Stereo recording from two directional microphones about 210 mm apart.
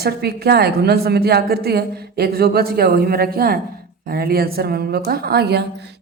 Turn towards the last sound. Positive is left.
turn(degrees=-50)  # may be behind; listen again after turning